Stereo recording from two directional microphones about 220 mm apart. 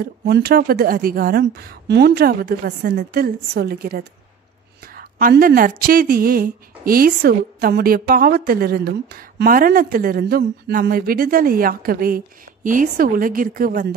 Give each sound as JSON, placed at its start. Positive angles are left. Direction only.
{"t": 0.0, "sound": "a woman's voice", "side_deg": -45}